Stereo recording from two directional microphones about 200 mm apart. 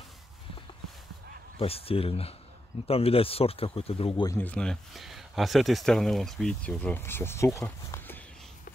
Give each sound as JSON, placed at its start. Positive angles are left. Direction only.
{"t": 1.6, "sound": "speech", "side_deg": 30}
{"t": 4.3, "sound": "speech", "side_deg": 10}